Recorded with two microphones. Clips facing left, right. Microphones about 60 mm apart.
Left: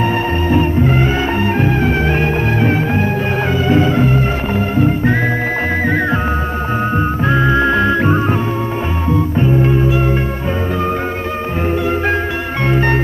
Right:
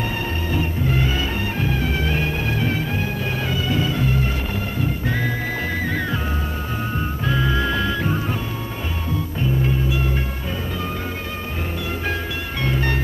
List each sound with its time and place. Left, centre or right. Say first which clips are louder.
0.5 s music: left 10 dB; left
7.2 s music: left 8 dB; left
12.6 s music: left 8 dB; left